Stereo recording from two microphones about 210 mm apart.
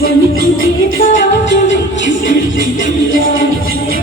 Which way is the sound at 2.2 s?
40° left (ahead or behind).